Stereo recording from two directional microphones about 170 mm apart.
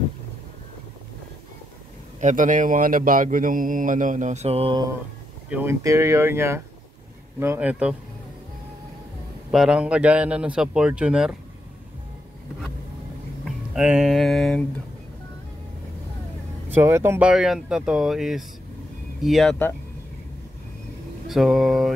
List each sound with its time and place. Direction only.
2.1 s speech: 45° right (ahead or behind)
5.5 s speech: 15° right (ahead or behind)
9.5 s a man's voice: 5° right (ahead or behind)
13.7 s a man's voice: 5° right (ahead or behind)
16.6 s a man's voice: 15° right (ahead or behind)
21.3 s mantra: centre (ahead or behind)